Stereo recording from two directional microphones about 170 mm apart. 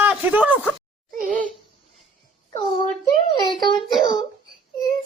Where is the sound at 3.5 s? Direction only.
30° left (ahead or behind).